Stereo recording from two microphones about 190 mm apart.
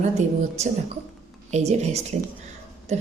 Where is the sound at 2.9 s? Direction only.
40° right (ahead or behind).